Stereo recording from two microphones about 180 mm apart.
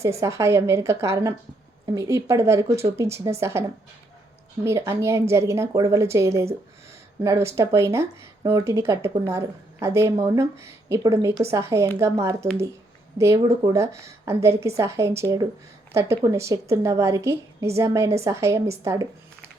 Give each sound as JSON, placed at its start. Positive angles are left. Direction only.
{"t": 0.0, "sound": "a woman's voice", "side_deg": -15}
{"t": 4.6, "sound": "a woman's voice", "side_deg": -15}